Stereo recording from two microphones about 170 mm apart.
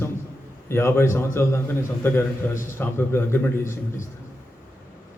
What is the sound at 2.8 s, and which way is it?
Speech, 15° left (ahead or behind).